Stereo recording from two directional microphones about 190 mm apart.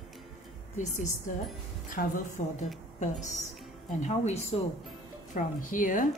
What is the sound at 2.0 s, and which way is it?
Speech, 50° left (ahead or behind).